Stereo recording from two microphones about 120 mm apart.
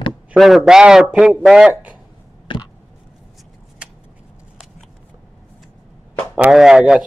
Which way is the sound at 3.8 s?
10° right (ahead or behind).